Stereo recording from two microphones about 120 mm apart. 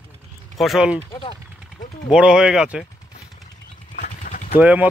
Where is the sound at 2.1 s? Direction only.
5° right (ahead or behind).